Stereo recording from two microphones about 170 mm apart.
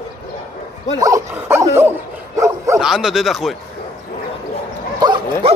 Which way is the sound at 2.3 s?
20° right (ahead or behind).